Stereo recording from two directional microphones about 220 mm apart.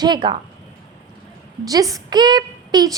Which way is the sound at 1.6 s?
15° right (ahead or behind).